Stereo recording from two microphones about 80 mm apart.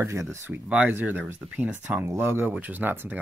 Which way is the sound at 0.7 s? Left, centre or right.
Centre.